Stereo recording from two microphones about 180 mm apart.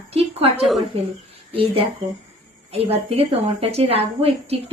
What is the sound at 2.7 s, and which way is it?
A woman's voice, 35° right (ahead or behind).